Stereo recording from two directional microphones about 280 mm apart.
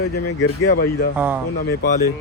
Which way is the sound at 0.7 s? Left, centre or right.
Left.